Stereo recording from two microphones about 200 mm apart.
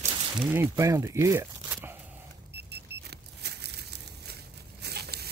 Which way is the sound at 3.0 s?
55° right (ahead or behind).